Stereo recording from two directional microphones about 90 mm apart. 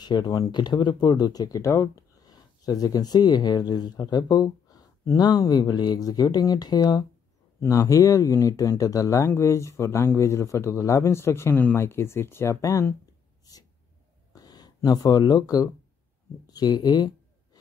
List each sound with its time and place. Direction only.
0.0 s speech: 50° left (ahead or behind)
7.6 s speech: 35° left (ahead or behind)
14.3 s speech: 45° left (ahead or behind)